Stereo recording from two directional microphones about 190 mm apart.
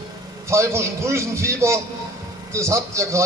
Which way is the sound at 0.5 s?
15° right (ahead or behind).